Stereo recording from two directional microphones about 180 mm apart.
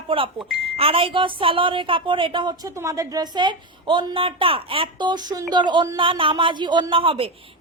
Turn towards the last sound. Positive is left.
turn(degrees=-30)  # may be behind; listen again after turning